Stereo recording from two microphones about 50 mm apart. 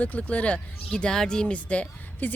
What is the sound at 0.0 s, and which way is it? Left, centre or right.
Speech, left.